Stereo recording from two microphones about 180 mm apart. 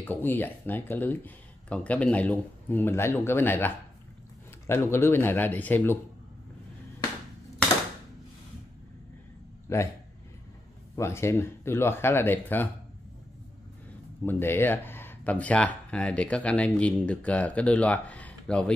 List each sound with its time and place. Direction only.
0.0 s speech: 10° left (ahead or behind)
9.7 s speech: 15° left (ahead or behind)
11.0 s speech: 15° left (ahead or behind)
14.2 s speech: 10° left (ahead or behind)